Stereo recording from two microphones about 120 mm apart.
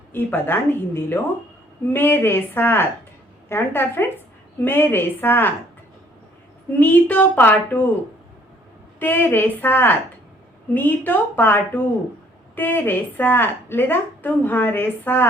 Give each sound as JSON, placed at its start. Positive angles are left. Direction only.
{"t": 0.1, "sound": "a woman's voice", "side_deg": 20}
{"t": 6.7, "sound": "a woman's voice", "side_deg": 15}
{"t": 9.0, "sound": "a woman's voice", "side_deg": 15}